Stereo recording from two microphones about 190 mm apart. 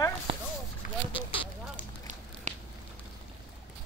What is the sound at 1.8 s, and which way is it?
Run, 40° right (ahead or behind).